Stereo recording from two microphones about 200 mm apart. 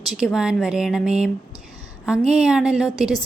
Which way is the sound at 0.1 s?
Centre (ahead or behind).